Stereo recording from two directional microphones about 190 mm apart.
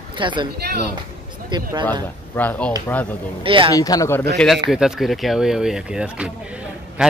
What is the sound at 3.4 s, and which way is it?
Speech, 25° right (ahead or behind).